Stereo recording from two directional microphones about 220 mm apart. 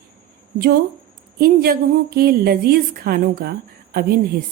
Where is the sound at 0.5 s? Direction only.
45° right (ahead or behind).